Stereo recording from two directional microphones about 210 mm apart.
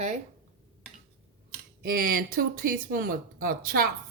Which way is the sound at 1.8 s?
40° right (ahead or behind).